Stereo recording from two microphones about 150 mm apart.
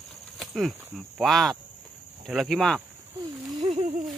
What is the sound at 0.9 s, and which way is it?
Speech, centre (ahead or behind).